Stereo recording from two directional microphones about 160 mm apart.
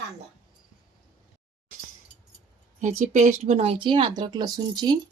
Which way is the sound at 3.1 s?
45° right (ahead or behind).